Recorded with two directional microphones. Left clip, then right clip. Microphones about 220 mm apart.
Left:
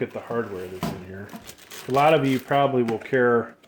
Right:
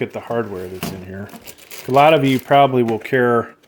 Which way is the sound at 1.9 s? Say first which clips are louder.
Right 6 dB; 45° right (ahead or behind).